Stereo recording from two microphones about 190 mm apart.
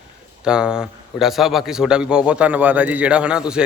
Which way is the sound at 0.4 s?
5° right (ahead or behind).